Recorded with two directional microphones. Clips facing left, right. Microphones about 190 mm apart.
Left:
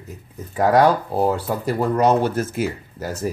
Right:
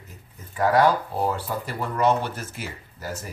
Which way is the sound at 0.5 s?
45° left (ahead or behind).